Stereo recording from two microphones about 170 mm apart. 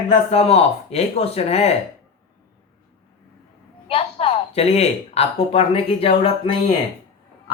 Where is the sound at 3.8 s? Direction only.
35° left (ahead or behind).